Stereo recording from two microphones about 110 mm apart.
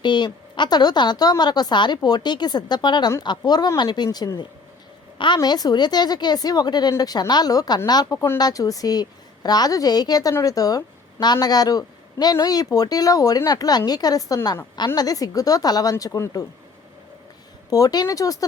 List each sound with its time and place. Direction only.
0.0 s a sound: 45° left (ahead or behind)
0.5 s a man's voice: 40° left (ahead or behind)
17.7 s a man's voice: 35° left (ahead or behind)